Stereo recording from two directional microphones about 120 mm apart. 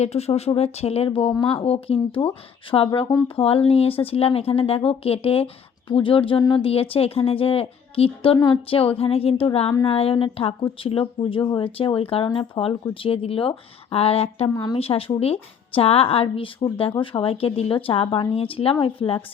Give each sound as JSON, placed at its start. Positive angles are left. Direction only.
{"t": 0.0, "sound": "speech", "side_deg": 60}
{"t": 14.5, "sound": "a woman's voice", "side_deg": 35}
{"t": 14.8, "sound": "speech", "side_deg": 55}